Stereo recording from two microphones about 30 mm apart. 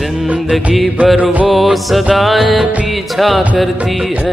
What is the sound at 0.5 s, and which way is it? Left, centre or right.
Music, centre.